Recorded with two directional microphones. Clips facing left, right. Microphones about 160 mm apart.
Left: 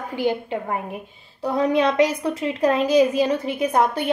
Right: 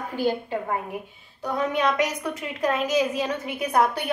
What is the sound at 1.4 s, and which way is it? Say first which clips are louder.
A woman's voice: left 5 dB; 35° left (ahead or behind).